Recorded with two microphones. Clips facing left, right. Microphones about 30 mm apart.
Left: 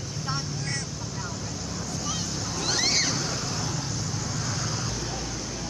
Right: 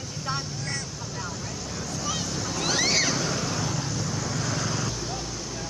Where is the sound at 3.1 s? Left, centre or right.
Right.